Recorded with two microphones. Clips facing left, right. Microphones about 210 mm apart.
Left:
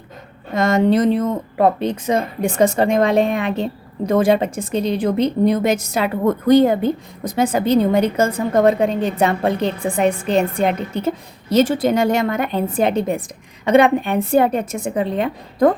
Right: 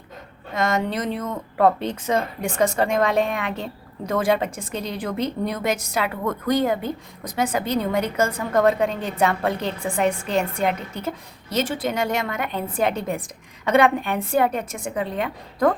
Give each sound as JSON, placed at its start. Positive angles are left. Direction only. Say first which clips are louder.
{"t": 0.5, "sound": "speech", "louder": "left 8 dB", "side_deg": 30}
{"t": 1.5, "sound": "a woman's voice", "louder": "left 1 dB", "side_deg": 15}